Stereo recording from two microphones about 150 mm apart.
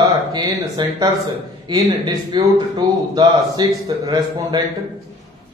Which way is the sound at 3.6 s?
30° right (ahead or behind).